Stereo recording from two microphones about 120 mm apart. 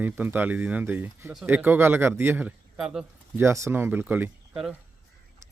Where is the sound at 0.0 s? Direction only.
15° right (ahead or behind).